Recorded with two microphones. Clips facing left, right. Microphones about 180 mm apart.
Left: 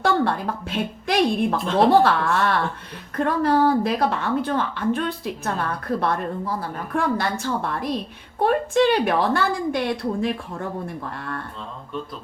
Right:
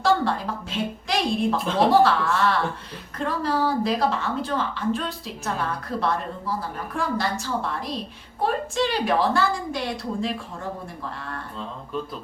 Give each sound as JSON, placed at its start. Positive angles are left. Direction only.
{"t": 0.0, "sound": "a woman's voice", "side_deg": 55}